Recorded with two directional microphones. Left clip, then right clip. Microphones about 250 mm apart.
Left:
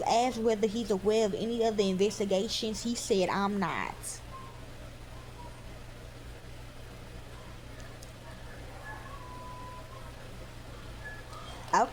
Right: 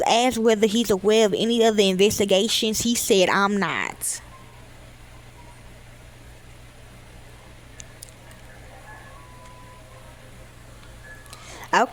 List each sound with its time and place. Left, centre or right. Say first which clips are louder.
0.0 s speech: right 8 dB; right
11.7 s speech: right 7 dB; right